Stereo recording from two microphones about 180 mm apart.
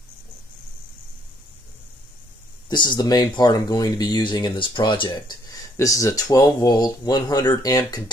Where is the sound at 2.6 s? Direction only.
25° left (ahead or behind).